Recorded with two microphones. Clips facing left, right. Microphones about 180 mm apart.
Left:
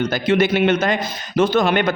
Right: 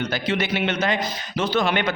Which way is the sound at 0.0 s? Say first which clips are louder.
Left 7 dB; 45° left (ahead or behind).